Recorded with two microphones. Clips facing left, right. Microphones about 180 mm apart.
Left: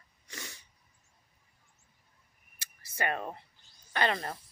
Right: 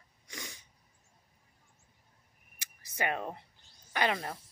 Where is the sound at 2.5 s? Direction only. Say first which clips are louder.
Even; 15° right (ahead or behind).